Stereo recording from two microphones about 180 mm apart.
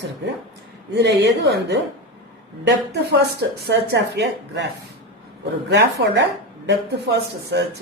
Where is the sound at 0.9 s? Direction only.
70° right (ahead or behind).